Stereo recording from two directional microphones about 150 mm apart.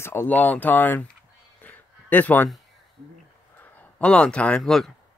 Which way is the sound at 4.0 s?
5° left (ahead or behind).